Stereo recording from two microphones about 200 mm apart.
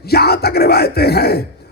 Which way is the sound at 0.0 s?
50° left (ahead or behind).